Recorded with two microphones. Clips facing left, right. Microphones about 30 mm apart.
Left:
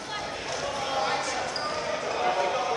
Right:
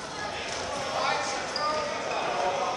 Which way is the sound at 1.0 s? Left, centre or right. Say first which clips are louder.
Right 1 dB; centre.